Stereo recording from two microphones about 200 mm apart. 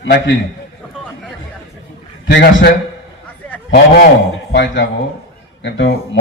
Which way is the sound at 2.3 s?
60° left (ahead or behind).